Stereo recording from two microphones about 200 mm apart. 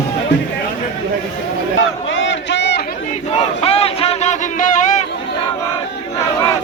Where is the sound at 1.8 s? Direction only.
70° left (ahead or behind).